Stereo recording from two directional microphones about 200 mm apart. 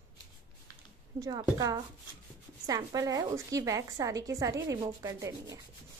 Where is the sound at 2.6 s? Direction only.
15° right (ahead or behind).